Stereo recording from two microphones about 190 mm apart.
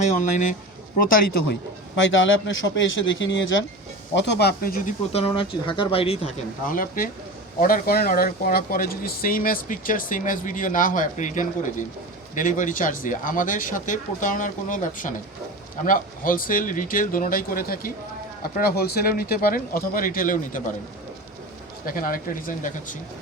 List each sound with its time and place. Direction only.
0.0 s speech: 40° left (ahead or behind)
2.0 s speech: 80° left
4.1 s speech: 65° left (ahead or behind)
5.1 s speech: 30° left (ahead or behind)
6.7 s speech: 45° left (ahead or behind)
21.8 s speech: 50° left (ahead or behind)